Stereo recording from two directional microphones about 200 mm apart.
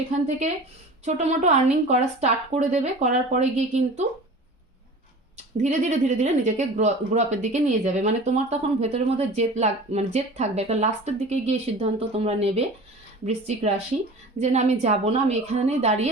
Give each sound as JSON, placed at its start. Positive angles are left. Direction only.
{"t": 1.0, "sound": "speech", "side_deg": -35}
{"t": 5.5, "sound": "speech", "side_deg": -35}